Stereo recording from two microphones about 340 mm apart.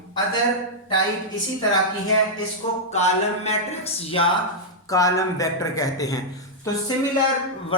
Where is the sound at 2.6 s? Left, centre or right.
Centre.